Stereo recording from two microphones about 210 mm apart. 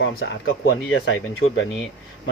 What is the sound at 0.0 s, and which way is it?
Speech, 60° left (ahead or behind).